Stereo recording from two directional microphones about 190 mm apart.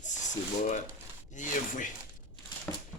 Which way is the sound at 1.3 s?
40° left (ahead or behind).